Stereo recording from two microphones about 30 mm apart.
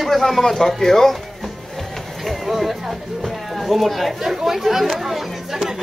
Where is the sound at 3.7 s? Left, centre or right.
Centre.